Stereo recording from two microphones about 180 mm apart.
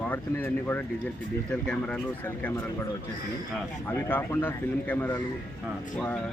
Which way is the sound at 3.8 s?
10° left (ahead or behind).